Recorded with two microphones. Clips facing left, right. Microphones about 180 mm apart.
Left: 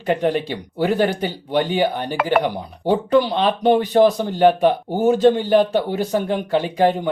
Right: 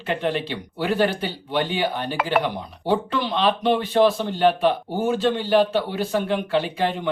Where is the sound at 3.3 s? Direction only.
45° left (ahead or behind).